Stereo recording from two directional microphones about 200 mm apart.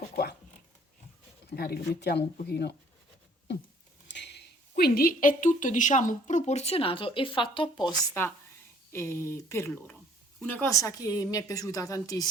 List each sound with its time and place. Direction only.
1.5 s speech: 50° left (ahead or behind)
4.1 s a sound: 60° left (ahead or behind)
4.7 s a woman's voice: 50° left (ahead or behind); by 12.3 s 20° left (ahead or behind)